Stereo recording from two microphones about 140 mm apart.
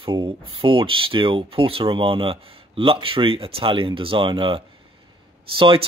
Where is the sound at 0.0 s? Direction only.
35° right (ahead or behind).